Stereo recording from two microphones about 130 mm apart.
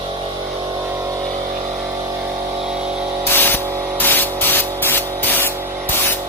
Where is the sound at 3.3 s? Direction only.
15° left (ahead or behind).